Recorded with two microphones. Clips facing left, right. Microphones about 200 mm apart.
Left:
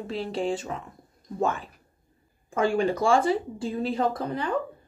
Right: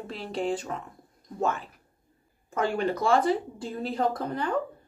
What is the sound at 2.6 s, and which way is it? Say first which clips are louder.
A woman's voice: left 3 dB; 10° left (ahead or behind).